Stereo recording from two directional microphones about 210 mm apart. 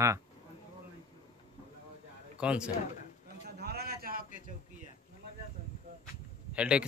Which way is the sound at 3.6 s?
50° right (ahead or behind).